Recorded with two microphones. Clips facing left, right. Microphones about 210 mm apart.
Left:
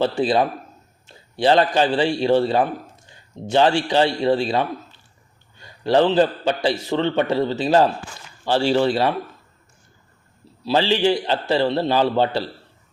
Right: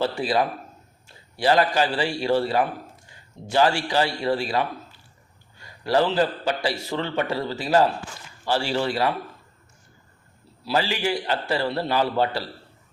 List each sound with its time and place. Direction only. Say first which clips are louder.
0.2 s a man's voice: left 4 dB; 25° left (ahead or behind)
10.7 s a man's voice: left 6 dB; 25° left (ahead or behind)